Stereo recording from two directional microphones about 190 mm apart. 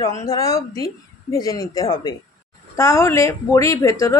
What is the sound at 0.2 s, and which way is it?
A woman's voice, 15° left (ahead or behind).